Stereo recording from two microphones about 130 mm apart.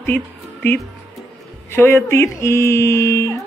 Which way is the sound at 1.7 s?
20° left (ahead or behind).